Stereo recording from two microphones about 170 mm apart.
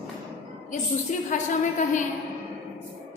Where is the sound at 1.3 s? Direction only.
50° left (ahead or behind).